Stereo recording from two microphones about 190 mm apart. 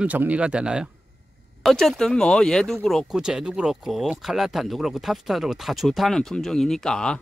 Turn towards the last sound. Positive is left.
turn(degrees=5)  # may be behind; listen again after turning